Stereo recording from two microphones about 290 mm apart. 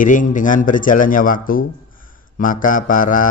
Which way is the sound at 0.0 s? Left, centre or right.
Left.